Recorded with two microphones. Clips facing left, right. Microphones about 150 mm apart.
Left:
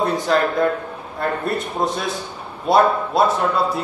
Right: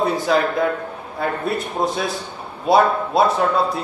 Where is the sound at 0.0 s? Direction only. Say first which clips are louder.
Even; centre (ahead or behind).